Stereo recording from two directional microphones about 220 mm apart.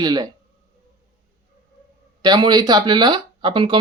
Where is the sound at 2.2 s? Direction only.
20° right (ahead or behind).